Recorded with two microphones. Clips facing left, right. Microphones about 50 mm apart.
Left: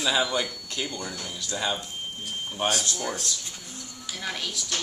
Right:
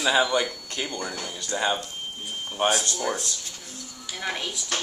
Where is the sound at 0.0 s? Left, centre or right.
Centre.